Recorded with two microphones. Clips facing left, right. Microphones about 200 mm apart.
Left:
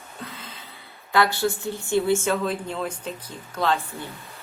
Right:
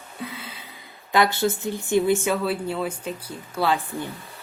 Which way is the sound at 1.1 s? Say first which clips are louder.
Right 1 dB; 20° right (ahead or behind).